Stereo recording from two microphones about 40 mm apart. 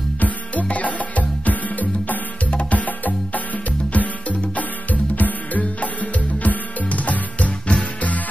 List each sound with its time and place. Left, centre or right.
0.2 s music: left